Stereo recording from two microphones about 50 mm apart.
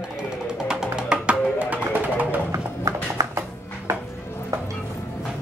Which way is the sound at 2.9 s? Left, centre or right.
Right.